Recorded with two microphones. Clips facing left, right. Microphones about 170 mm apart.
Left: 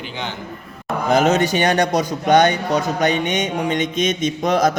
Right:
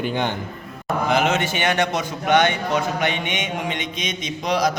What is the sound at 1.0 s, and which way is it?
A man's voice, 40° left (ahead or behind).